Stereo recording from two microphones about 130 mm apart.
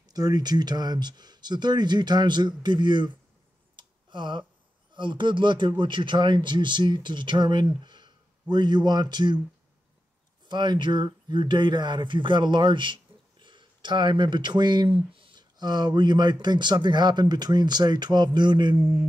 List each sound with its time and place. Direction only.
0.1 s speech: 30° right (ahead or behind)
3.7 s a sound: 35° right (ahead or behind)
4.9 s speech: 40° right (ahead or behind)
10.5 s speech: 35° right (ahead or behind)